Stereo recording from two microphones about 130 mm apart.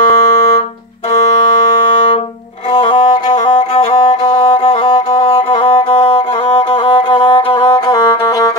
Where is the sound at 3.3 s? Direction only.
45° left (ahead or behind).